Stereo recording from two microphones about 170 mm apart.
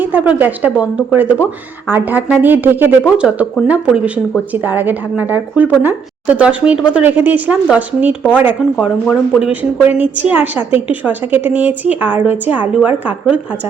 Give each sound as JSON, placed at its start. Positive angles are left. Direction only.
{"t": 0.0, "sound": "a woman's voice", "side_deg": -10}